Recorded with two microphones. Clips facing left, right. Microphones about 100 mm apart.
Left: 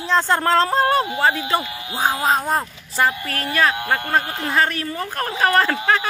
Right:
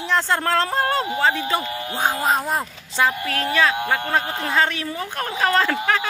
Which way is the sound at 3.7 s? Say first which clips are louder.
Even; 10° right (ahead or behind).